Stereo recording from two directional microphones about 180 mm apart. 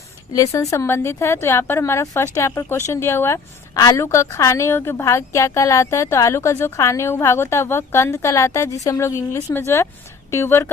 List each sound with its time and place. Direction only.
0.3 s speech: 15° left (ahead or behind)